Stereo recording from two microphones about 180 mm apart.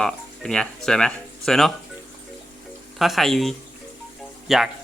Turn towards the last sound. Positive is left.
turn(degrees=0)  # may be behind; listen again after turning